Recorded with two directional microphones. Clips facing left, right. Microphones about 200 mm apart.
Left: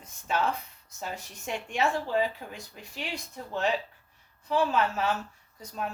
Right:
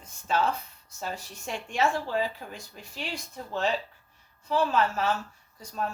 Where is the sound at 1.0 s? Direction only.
15° left (ahead or behind).